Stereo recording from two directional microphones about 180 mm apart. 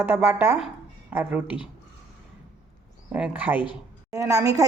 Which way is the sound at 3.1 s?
5° right (ahead or behind).